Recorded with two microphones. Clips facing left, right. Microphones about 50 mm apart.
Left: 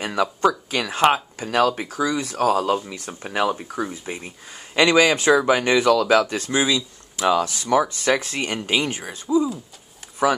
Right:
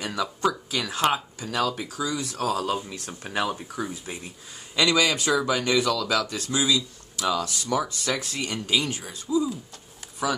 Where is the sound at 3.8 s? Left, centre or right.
Left.